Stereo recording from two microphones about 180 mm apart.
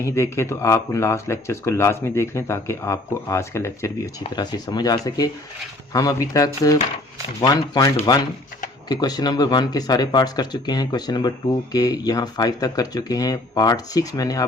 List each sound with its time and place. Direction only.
0.0 s speech: 15° left (ahead or behind)